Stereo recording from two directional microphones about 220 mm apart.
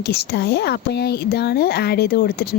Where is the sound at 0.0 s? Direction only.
45° left (ahead or behind).